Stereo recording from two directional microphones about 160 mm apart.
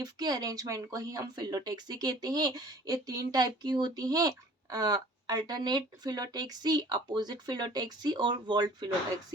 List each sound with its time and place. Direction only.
0.0 s speech: 25° right (ahead or behind)